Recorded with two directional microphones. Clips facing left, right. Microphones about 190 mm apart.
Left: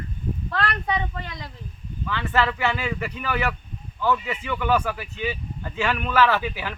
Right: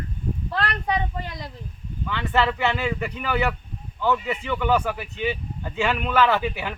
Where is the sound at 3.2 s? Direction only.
15° right (ahead or behind).